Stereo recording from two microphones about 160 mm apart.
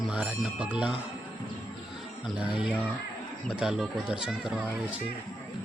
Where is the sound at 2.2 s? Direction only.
5° right (ahead or behind).